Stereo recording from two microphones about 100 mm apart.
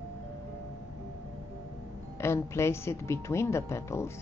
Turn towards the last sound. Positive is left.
turn(degrees=25)  # may be behind; listen again after turning